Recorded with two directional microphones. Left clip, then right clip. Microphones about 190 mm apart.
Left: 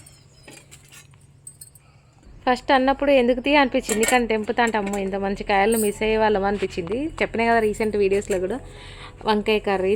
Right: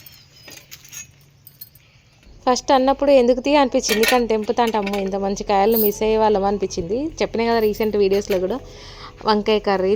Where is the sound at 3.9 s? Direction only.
10° left (ahead or behind).